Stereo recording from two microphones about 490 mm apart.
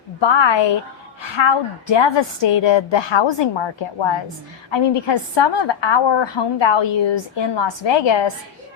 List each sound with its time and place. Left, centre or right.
0.2 s a woman's voice: left